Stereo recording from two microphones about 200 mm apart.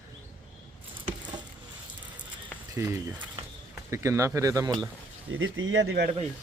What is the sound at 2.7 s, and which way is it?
Speech, 10° right (ahead or behind).